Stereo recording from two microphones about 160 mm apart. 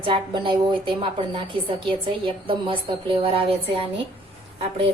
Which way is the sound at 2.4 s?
35° right (ahead or behind).